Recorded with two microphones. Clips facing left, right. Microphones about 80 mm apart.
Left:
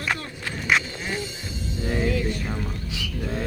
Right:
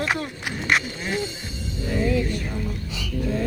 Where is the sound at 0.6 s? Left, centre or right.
Centre.